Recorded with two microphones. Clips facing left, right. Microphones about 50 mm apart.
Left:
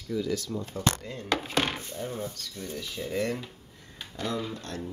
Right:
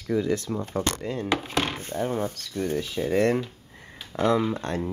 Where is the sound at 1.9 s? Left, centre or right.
Right.